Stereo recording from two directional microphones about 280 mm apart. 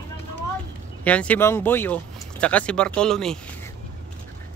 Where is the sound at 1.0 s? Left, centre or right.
Centre.